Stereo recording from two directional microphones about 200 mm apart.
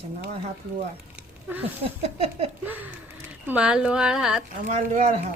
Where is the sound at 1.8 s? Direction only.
30° right (ahead or behind).